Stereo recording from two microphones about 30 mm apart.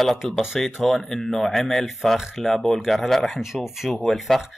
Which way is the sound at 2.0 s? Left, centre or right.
Centre.